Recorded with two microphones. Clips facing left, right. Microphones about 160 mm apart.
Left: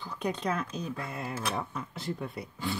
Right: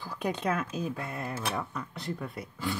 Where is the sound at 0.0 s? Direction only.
5° right (ahead or behind).